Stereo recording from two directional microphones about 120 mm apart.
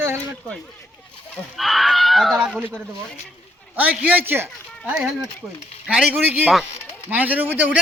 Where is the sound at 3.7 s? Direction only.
10° right (ahead or behind).